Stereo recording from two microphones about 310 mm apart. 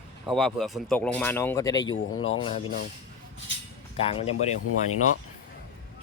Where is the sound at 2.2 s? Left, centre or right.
Left.